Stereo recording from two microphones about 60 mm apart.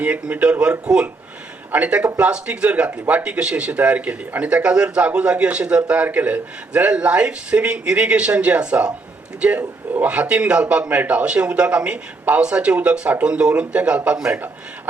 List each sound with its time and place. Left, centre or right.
0.0 s a man's voice: right
9.6 s a man's voice: right
10.1 s a man's voice: centre
14.3 s a man's voice: right